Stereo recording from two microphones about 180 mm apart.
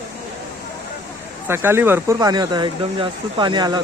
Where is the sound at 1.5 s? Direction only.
15° right (ahead or behind).